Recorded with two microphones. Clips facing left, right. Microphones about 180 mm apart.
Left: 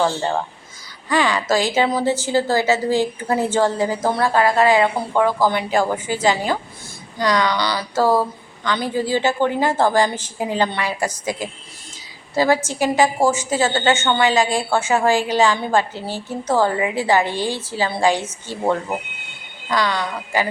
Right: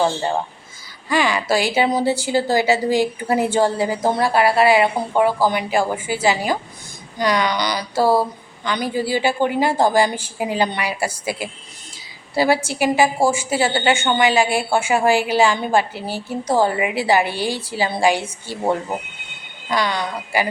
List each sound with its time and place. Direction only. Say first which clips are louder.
0.0 s a woman's voice: even; 10° right (ahead or behind)